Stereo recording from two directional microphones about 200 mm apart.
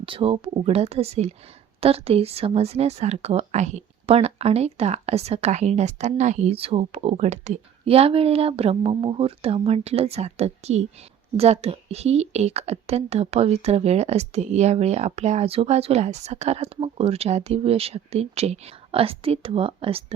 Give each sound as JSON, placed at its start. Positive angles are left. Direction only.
{"t": 0.0, "sound": "speech", "side_deg": -25}